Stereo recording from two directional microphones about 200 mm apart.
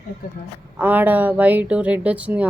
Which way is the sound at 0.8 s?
10° right (ahead or behind).